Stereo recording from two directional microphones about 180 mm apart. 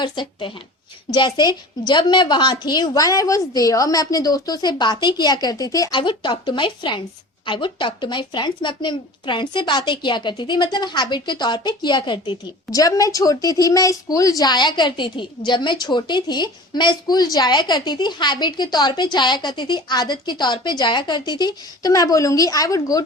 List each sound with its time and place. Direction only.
0.0 s a woman's voice: 25° left (ahead or behind)